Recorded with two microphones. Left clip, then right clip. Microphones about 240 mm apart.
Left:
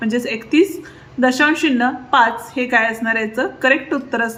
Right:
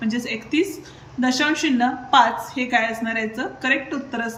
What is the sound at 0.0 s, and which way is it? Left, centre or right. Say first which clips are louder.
Speech: left 6 dB; centre.